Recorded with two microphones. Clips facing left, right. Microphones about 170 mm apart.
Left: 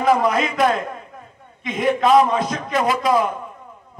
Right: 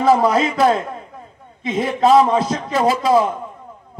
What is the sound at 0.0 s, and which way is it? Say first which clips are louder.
A man's voice: right 3 dB; 30° right (ahead or behind).